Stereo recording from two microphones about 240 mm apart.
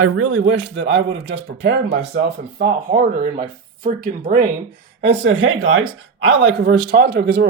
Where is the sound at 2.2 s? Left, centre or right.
Right.